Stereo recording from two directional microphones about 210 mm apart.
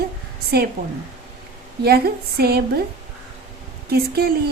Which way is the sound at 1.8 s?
50° right (ahead or behind).